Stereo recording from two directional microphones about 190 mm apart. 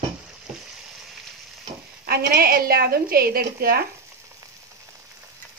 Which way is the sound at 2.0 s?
55° right (ahead or behind).